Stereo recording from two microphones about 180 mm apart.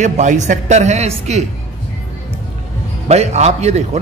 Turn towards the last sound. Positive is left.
turn(degrees=-35)  # may be behind; listen again after turning